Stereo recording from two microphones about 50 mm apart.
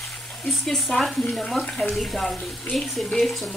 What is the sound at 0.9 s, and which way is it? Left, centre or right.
Speech, centre.